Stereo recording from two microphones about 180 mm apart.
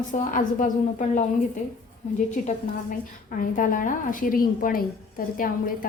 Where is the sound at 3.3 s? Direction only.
50° left (ahead or behind).